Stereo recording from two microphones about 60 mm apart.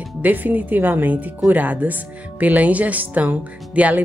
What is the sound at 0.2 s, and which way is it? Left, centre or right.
Speech, right.